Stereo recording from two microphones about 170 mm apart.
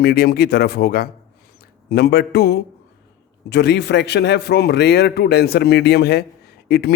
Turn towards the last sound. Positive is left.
turn(degrees=65)  # may be behind; listen again after turning